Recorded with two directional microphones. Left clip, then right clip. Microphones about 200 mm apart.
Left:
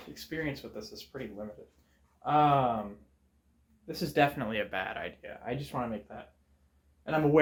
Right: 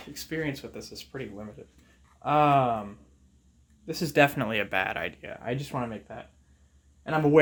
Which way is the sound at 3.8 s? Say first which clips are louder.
Right 5 dB; 55° right (ahead or behind).